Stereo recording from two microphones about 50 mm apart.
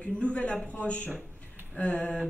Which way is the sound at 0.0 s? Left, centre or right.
Left.